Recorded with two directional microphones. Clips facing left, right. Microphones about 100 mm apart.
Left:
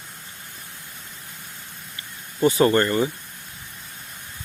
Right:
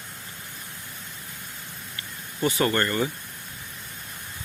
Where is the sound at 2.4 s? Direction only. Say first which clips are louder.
Left 6 dB; 30° left (ahead or behind).